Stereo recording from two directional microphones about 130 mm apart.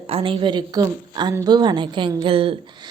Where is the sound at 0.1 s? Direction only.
45° right (ahead or behind).